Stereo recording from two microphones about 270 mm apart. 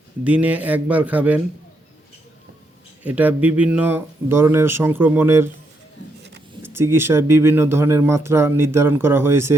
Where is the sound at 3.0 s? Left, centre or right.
Centre.